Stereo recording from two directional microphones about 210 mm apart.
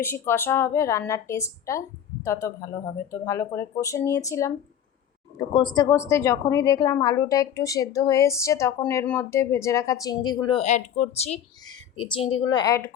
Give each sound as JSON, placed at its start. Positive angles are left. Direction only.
{"t": 0.0, "sound": "a woman's voice", "side_deg": 10}